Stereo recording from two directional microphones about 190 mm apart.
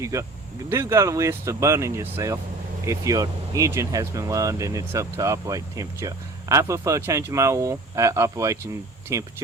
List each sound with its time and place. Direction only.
0.0 s speech: 15° right (ahead or behind)